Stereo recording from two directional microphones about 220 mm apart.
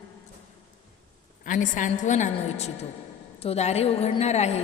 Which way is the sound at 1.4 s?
35° left (ahead or behind).